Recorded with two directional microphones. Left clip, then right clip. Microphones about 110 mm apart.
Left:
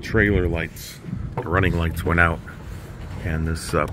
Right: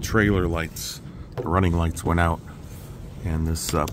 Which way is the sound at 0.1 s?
35° right (ahead or behind).